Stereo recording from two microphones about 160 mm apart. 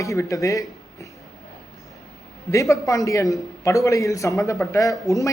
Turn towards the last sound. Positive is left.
turn(degrees=20)  # may be behind; listen again after turning